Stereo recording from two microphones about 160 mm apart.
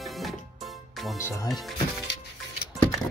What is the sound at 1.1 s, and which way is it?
Speech, 15° left (ahead or behind).